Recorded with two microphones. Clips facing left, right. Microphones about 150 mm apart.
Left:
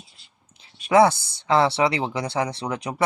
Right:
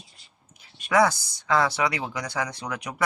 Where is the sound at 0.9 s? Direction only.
25° left (ahead or behind).